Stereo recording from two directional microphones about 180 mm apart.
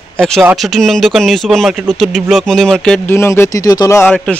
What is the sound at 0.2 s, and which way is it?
Speech, centre (ahead or behind).